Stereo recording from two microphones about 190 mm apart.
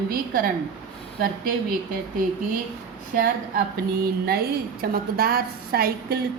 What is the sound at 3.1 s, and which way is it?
Speech, 50° right (ahead or behind).